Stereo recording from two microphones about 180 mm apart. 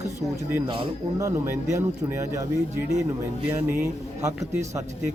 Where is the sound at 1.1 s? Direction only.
15° right (ahead or behind).